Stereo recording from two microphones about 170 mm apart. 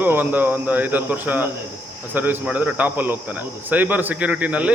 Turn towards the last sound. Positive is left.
turn(degrees=-10)  # may be behind; listen again after turning